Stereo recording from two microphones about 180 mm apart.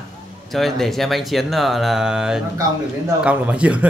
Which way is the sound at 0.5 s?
Centre (ahead or behind).